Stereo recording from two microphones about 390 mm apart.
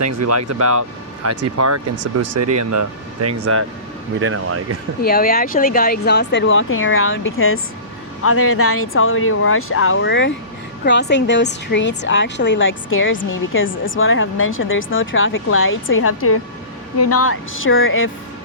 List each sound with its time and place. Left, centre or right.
0.0 s speech: right
5.0 s a woman's voice: left